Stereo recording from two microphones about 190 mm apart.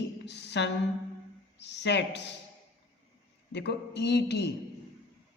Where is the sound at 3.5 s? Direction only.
65° left (ahead or behind).